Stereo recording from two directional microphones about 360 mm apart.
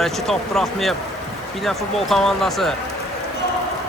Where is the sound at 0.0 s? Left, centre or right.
Centre.